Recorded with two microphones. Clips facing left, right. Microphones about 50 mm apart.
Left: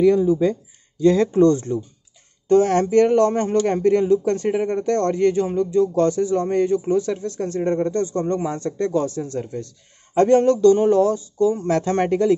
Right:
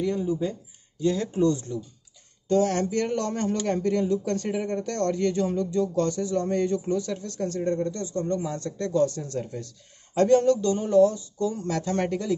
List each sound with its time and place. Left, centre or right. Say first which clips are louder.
1.0 s speech: left 9 dB; left
1.5 s speech: left 8 dB; left; by 7.6 s centre
7.6 s speech: left 9 dB; left
8.5 s speech: left 3 dB; left
9.1 s speech: left 5 dB; centre
10.1 s speech: left 4 dB; left
10.7 s speech: left 5 dB; left
11.1 s speech: left 9 dB; left
11.6 s speech: left 7 dB; left